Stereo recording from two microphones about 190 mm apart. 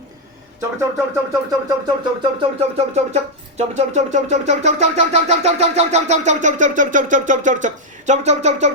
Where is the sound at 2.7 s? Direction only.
35° right (ahead or behind).